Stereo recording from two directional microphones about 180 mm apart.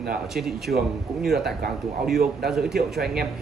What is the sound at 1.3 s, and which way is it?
Speech, 60° right (ahead or behind).